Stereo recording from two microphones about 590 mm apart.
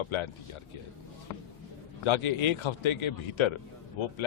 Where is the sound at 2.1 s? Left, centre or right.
Left.